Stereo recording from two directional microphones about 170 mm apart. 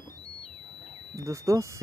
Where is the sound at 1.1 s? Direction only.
20° right (ahead or behind).